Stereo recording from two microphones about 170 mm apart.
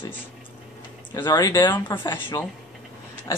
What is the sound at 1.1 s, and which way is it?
Speech, 25° left (ahead or behind).